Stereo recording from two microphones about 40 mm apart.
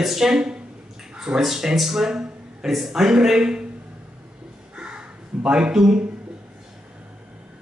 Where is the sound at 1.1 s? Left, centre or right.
Right.